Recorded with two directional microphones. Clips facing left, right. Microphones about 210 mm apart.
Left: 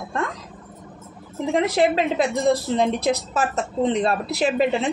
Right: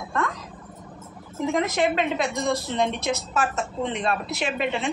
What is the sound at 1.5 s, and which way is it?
A woman's voice, 35° left (ahead or behind).